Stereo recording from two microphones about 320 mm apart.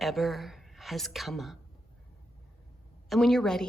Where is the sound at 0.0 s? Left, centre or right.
Centre.